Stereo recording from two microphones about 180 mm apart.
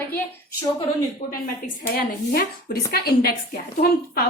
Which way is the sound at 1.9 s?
55° left (ahead or behind).